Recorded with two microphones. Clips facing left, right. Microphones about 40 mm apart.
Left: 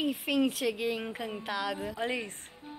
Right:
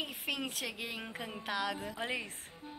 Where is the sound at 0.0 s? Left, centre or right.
Centre.